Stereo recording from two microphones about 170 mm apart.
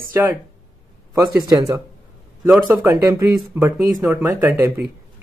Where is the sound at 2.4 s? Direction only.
10° right (ahead or behind).